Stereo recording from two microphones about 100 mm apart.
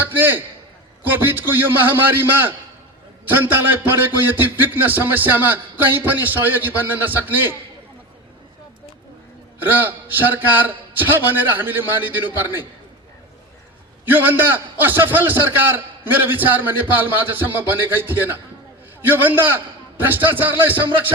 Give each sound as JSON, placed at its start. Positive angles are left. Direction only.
{"t": 0.0, "sound": "a man's voice", "side_deg": -20}
{"t": 9.6, "sound": "a man's voice", "side_deg": -20}
{"t": 14.1, "sound": "a man's voice", "side_deg": -20}